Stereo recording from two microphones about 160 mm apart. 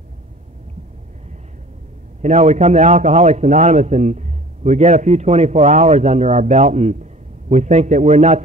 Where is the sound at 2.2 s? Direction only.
45° right (ahead or behind).